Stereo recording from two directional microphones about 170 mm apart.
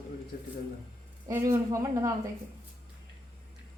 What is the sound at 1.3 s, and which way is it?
Speech, 15° right (ahead or behind).